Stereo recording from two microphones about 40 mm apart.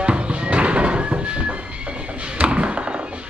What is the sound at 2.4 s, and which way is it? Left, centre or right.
Music, right.